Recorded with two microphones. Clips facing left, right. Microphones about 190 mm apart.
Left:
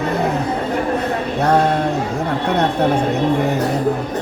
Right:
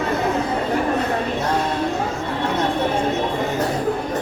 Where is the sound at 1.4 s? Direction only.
65° left (ahead or behind).